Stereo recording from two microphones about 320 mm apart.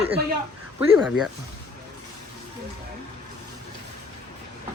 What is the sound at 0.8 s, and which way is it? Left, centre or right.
Speech, centre.